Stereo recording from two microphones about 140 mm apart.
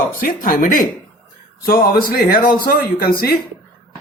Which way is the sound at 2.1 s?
90° left.